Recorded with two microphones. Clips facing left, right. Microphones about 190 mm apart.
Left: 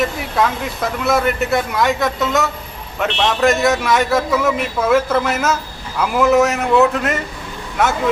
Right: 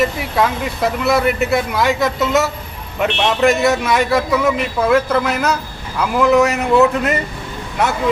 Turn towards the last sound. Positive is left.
turn(degrees=0)  # may be behind; listen again after turning